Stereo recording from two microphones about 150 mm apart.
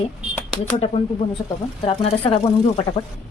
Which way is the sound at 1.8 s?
40° left (ahead or behind).